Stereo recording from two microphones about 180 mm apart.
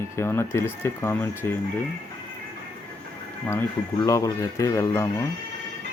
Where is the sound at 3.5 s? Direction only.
15° left (ahead or behind).